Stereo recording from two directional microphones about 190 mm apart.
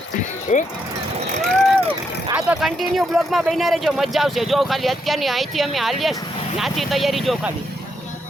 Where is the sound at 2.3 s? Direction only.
5° right (ahead or behind).